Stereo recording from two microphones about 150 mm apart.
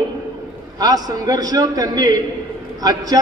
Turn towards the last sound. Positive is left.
turn(degrees=-25)  # may be behind; listen again after turning